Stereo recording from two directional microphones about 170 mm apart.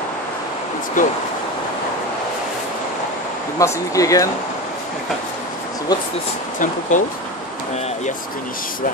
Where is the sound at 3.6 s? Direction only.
20° left (ahead or behind).